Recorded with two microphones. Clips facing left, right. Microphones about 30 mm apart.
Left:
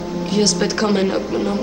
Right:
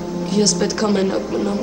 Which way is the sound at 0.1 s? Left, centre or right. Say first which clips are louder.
Even; left.